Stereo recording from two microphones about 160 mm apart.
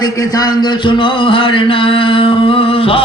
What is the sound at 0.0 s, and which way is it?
Speech, 25° left (ahead or behind).